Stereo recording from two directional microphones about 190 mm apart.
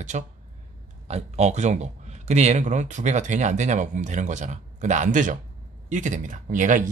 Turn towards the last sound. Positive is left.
turn(degrees=-45)  # may be behind; listen again after turning